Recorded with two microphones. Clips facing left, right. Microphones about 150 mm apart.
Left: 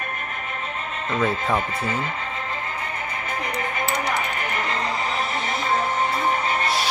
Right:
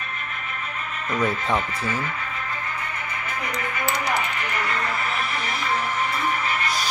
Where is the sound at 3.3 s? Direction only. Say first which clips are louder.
Left 2 dB; 35° left (ahead or behind).